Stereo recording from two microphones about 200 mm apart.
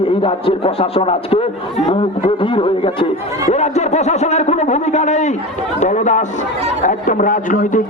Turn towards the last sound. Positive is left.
turn(degrees=40)  # may be behind; listen again after turning